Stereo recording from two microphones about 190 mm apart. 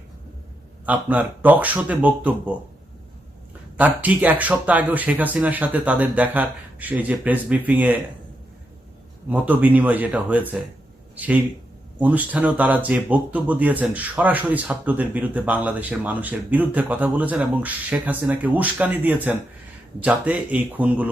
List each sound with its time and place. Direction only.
0.9 s speech: 10° right (ahead or behind)
3.8 s speech: 10° right (ahead or behind)
9.3 s speech: 10° right (ahead or behind)